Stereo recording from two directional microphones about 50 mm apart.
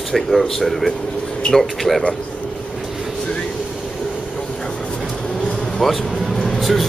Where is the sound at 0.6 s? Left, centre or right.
Centre.